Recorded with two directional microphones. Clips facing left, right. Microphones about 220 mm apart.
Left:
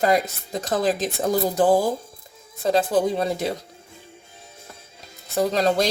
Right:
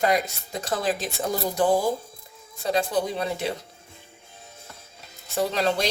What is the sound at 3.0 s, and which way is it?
Speech, 40° left (ahead or behind).